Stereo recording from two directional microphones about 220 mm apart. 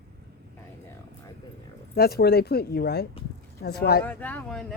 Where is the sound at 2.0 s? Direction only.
45° left (ahead or behind).